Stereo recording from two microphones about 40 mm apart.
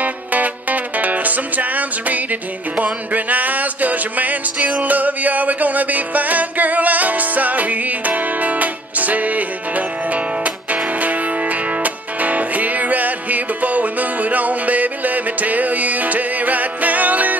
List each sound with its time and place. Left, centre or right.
0.0 s music: right